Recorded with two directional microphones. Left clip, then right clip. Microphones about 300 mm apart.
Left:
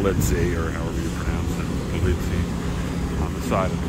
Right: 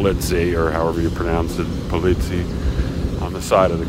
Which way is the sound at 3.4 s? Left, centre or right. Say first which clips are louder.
Right 9 dB; right.